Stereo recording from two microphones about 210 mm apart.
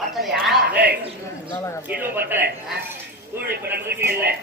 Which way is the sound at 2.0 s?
10° right (ahead or behind).